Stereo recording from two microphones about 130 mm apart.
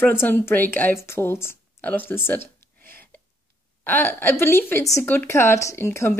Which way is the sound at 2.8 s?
15° left (ahead or behind).